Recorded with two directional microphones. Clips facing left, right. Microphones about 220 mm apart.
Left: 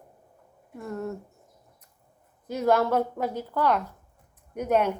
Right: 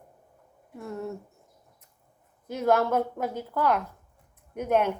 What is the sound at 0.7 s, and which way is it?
Speech, centre (ahead or behind).